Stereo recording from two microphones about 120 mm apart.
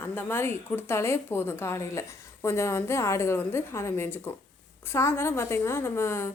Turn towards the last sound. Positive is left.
turn(degrees=20)  # may be behind; listen again after turning